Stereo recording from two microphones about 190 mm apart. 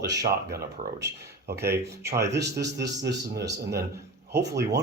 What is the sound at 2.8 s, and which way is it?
Speech, 60° right (ahead or behind).